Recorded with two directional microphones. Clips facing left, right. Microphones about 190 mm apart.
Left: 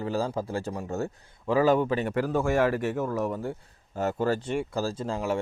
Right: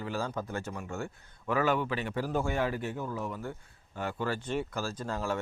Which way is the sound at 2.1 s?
85° left.